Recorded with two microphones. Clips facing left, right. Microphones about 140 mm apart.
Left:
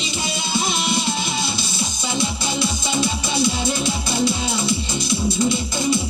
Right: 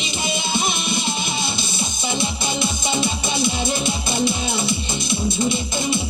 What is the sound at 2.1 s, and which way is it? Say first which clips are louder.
Music: left 2 dB; 20° right (ahead or behind).